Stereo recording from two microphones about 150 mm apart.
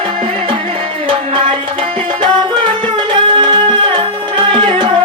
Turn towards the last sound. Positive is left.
turn(degrees=-30)  # may be behind; listen again after turning